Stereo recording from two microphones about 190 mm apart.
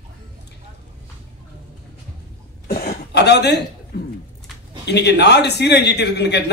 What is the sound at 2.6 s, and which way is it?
Cough, 50° left (ahead or behind).